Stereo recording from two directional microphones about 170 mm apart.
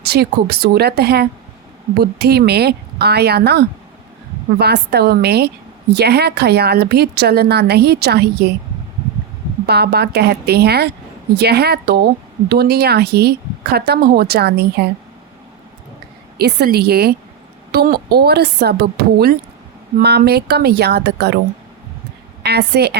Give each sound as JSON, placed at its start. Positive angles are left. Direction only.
{"t": 0.1, "sound": "a woman's voice", "side_deg": -70}
{"t": 9.6, "sound": "a woman's voice", "side_deg": -70}
{"t": 16.4, "sound": "a woman's voice", "side_deg": -70}
{"t": 22.4, "sound": "a woman's voice", "side_deg": -75}